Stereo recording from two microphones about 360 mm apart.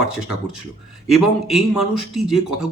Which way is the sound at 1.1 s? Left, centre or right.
Centre.